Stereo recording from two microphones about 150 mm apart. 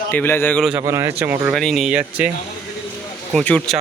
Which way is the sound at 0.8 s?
20° right (ahead or behind).